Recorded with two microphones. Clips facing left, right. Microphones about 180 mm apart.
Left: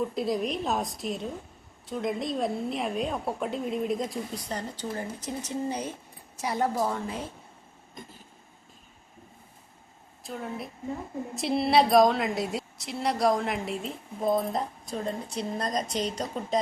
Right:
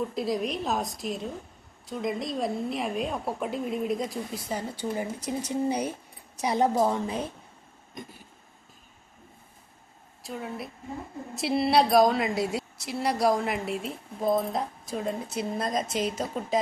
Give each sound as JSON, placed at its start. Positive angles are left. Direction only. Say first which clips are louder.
{"t": 0.0, "sound": "a woman's voice", "louder": "even", "side_deg": 0}
{"t": 10.2, "sound": "a woman's voice", "louder": "even", "side_deg": 0}